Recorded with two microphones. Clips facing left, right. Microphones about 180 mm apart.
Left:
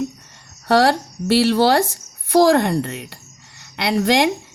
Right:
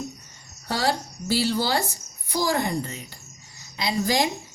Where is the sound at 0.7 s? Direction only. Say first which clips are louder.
Left 10 dB; 75° left (ahead or behind).